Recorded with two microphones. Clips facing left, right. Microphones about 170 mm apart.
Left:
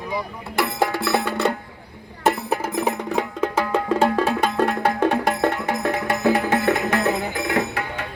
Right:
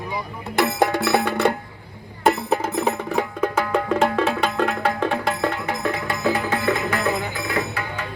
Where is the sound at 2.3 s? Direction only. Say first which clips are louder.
Right 1 dB; 10° left (ahead or behind); by 7.6 s 60° left (ahead or behind).